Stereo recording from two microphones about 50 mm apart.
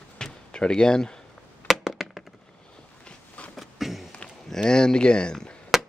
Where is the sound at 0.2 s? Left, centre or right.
Centre.